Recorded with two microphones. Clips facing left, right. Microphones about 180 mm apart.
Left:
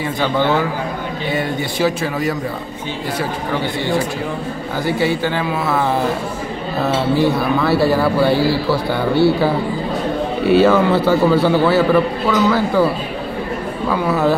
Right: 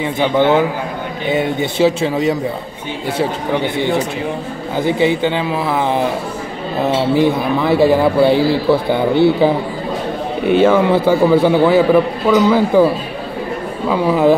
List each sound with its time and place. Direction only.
0.0 s speech: 20° right (ahead or behind)
10.5 s a man's voice: 15° right (ahead or behind)
13.8 s a man's voice: 15° right (ahead or behind)